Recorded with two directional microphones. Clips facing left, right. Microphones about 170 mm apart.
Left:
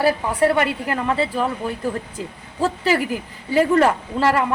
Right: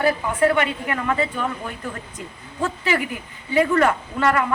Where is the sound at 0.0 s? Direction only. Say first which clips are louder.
Left 1 dB; 35° left (ahead or behind).